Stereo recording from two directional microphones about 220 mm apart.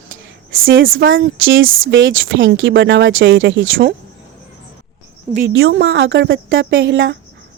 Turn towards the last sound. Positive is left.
turn(degrees=-55)  # may be behind; listen again after turning